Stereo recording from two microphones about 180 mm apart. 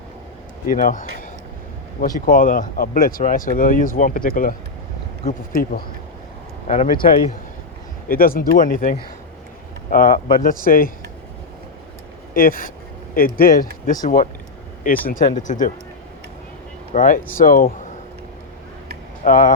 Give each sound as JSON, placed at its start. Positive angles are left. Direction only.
{"t": 0.7, "sound": "speech", "side_deg": 50}
{"t": 6.7, "sound": "speech", "side_deg": 40}
{"t": 8.0, "sound": "speech", "side_deg": 50}
{"t": 12.3, "sound": "speech", "side_deg": 50}
{"t": 16.9, "sound": "speech", "side_deg": 45}
{"t": 19.2, "sound": "speech", "side_deg": 45}